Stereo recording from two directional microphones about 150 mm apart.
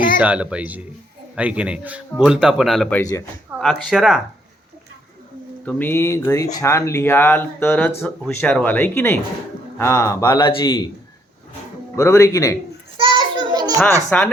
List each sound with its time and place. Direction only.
0.2 s speech: 10° right (ahead or behind)
3.0 s speech: 20° left (ahead or behind)
3.6 s speech: centre (ahead or behind)
5.6 s speech: 15° left (ahead or behind); by 10.8 s 30° left (ahead or behind)
11.9 s speech: 20° left (ahead or behind)
13.0 s children playing: 30° right (ahead or behind)
14.1 s speech: 10° left (ahead or behind)